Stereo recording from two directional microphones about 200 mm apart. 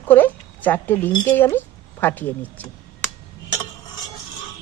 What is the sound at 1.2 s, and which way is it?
A woman's voice, 10° left (ahead or behind).